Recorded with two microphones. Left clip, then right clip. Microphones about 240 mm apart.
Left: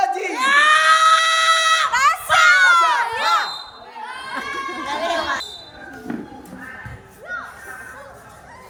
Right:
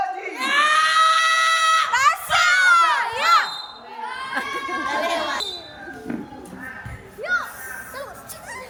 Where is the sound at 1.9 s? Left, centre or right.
Centre.